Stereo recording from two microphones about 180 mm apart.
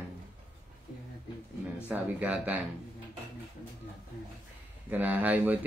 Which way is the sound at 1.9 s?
5° right (ahead or behind).